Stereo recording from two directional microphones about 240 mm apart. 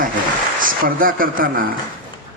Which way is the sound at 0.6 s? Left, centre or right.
Right.